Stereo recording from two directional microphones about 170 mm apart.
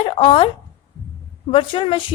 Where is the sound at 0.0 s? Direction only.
30° left (ahead or behind).